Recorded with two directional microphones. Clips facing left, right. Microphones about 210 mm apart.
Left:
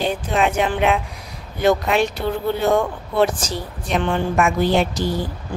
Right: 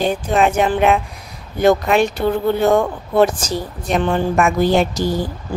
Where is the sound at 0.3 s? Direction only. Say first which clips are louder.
Right 4 dB; 45° right (ahead or behind).